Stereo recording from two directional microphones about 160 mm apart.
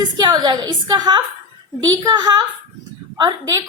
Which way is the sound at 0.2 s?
25° right (ahead or behind).